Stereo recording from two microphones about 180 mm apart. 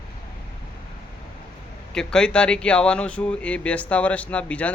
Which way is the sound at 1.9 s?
5° left (ahead or behind).